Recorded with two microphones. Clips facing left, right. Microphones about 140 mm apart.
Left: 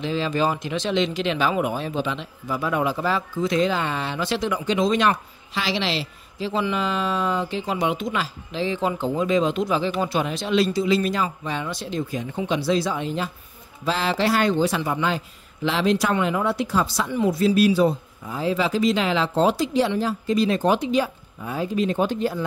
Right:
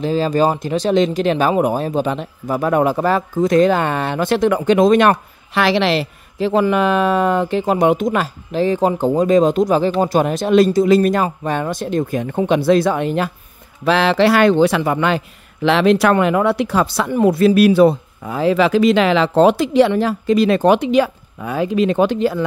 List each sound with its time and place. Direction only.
0.0 s speech: 40° right (ahead or behind); by 22.4 s 85° right